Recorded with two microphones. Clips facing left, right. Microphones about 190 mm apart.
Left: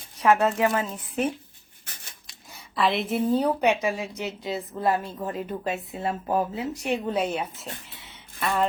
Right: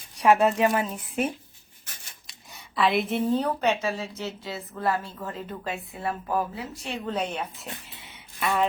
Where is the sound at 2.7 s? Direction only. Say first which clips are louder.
Even; centre (ahead or behind).